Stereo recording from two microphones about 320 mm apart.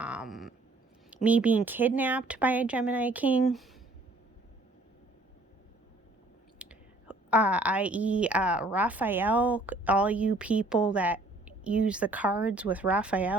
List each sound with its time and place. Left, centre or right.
0.0 s a sound: centre
1.1 s a woman's voice: centre
6.6 s a woman's voice: centre